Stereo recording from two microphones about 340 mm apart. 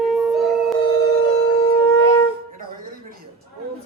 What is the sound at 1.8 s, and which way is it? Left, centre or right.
Shofar, centre.